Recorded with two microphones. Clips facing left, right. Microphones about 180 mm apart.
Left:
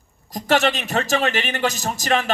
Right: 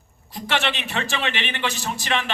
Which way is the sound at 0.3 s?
40° left (ahead or behind).